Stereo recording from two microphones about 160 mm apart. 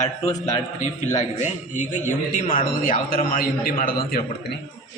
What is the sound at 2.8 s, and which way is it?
A man's voice, 60° left (ahead or behind).